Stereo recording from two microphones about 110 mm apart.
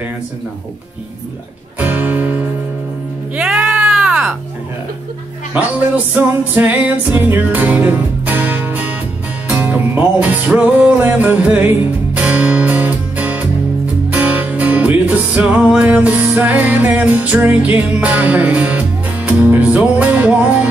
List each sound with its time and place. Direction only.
1.8 s music: 15° right (ahead or behind)
5.5 s music: 15° right (ahead or behind)